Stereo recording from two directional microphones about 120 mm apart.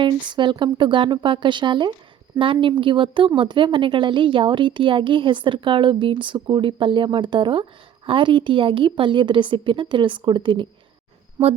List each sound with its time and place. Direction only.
0.0 s a woman's voice: 40° right (ahead or behind)